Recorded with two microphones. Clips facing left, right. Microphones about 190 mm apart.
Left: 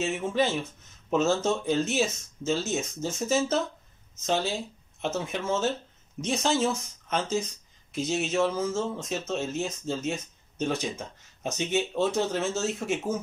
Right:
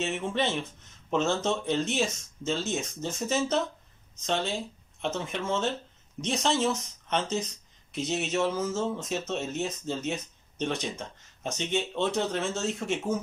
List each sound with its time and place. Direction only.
0.0 s speech: 5° left (ahead or behind)
5.0 s speech: 5° left (ahead or behind)